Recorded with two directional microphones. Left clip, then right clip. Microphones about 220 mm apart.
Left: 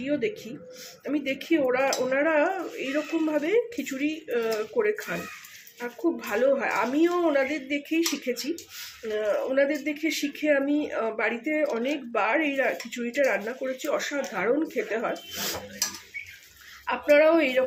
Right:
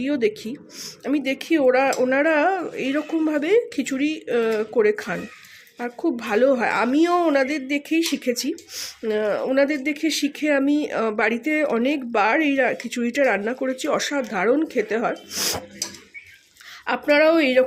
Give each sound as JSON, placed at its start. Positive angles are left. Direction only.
{"t": 0.0, "sound": "speech", "side_deg": -55}
{"t": 16.8, "sound": "speech", "side_deg": -55}